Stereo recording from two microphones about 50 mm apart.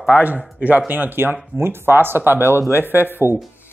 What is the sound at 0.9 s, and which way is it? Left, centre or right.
Speech, right.